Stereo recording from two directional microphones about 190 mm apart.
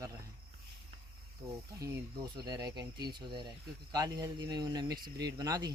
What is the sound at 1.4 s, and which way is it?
Speech, 20° right (ahead or behind).